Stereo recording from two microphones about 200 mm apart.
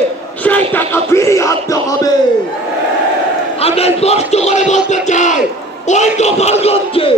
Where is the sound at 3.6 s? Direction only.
30° left (ahead or behind).